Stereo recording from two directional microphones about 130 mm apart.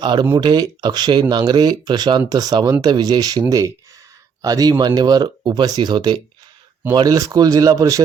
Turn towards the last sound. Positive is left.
turn(degrees=-25)  # may be behind; listen again after turning